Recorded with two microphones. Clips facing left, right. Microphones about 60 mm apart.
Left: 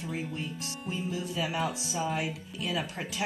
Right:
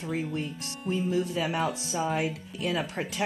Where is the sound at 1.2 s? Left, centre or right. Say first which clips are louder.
Right 3 dB; right.